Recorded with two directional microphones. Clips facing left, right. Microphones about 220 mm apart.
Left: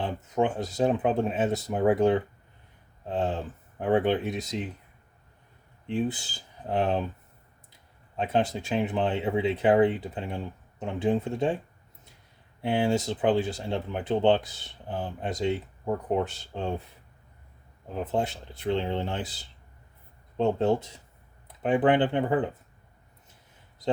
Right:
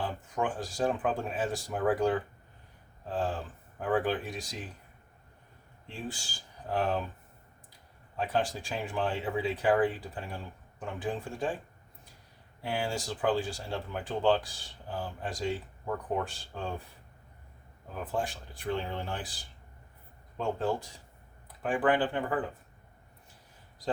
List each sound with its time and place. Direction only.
0.0 s speech: 25° left (ahead or behind)
5.9 s speech: 20° left (ahead or behind)
8.1 s speech: 20° left (ahead or behind)
12.6 s speech: 20° left (ahead or behind)
17.9 s speech: 20° left (ahead or behind)